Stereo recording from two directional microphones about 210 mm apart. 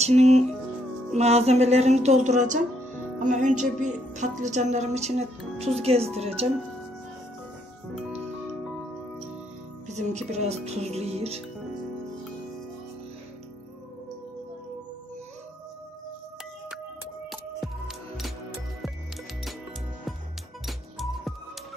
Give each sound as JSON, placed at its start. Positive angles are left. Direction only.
{"t": 0.0, "sound": "a woman's voice", "side_deg": -30}
{"t": 9.8, "sound": "a woman's voice", "side_deg": -35}
{"t": 17.3, "sound": "music", "side_deg": 0}
{"t": 20.6, "sound": "music", "side_deg": 0}